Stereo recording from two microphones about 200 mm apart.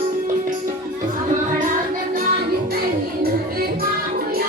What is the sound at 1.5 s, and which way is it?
Music, 40° right (ahead or behind).